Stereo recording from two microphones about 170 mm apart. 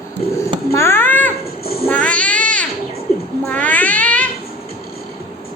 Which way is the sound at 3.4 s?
10° left (ahead or behind).